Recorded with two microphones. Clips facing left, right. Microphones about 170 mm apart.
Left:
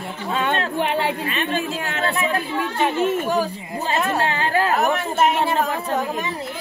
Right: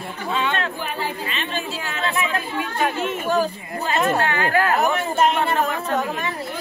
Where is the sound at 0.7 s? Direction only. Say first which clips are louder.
Left 6 dB; 75° left (ahead or behind).